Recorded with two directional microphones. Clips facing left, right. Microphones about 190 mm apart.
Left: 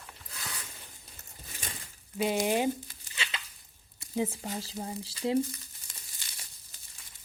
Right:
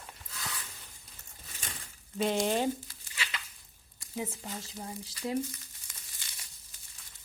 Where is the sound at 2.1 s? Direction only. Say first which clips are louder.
Left 1 dB; 10° left (ahead or behind).